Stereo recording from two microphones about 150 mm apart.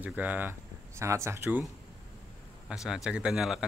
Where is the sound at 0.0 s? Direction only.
10° right (ahead or behind).